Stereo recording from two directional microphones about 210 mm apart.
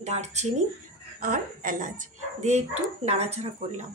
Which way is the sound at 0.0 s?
30° right (ahead or behind).